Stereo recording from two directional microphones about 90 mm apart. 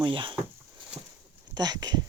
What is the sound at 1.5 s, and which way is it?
Speech, 45° right (ahead or behind).